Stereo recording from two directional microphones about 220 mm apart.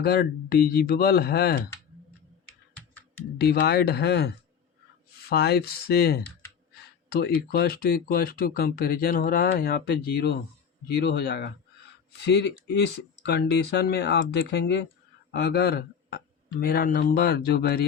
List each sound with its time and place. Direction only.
0.0 s speech: 45° left (ahead or behind)
3.3 s speech: 45° left (ahead or behind)
5.3 s speech: 45° left (ahead or behind)